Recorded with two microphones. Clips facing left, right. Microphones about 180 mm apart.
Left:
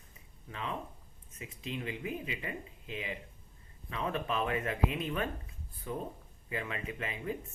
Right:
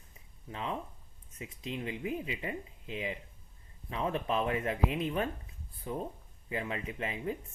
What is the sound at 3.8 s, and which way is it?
Speech, 30° right (ahead or behind).